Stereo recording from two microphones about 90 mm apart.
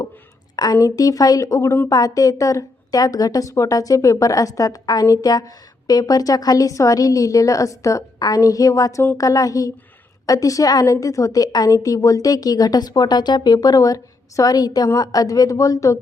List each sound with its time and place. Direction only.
0.5 s a woman's voice: 50° left (ahead or behind)